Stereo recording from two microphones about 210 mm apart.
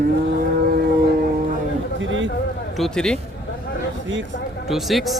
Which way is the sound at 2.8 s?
Centre (ahead or behind).